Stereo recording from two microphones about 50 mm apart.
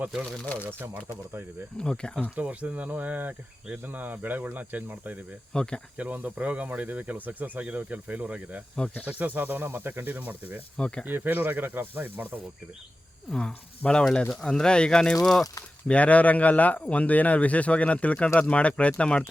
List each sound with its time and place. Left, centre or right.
1.8 s speech: centre
2.3 s speech: right
5.5 s speech: centre
6.0 s speech: right
10.8 s speech: centre
11.0 s speech: right
13.3 s speech: centre
15.1 s speech: centre
15.9 s speech: left